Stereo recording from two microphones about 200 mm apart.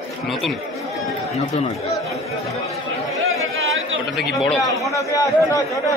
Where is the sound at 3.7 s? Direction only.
75° right (ahead or behind).